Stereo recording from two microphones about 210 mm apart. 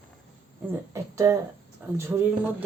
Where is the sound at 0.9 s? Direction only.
15° right (ahead or behind).